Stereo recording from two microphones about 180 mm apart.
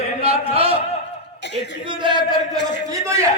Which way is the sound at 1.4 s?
75° left (ahead or behind).